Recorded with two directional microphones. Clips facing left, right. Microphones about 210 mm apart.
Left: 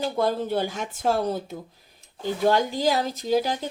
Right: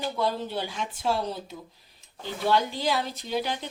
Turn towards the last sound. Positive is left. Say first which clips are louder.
# left 6 dB
turn(degrees=40)  # may be behind; listen again after turning